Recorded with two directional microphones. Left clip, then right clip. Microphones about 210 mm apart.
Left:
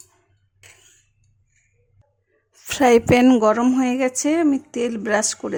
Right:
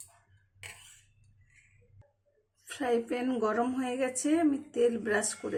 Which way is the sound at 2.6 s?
50° left (ahead or behind).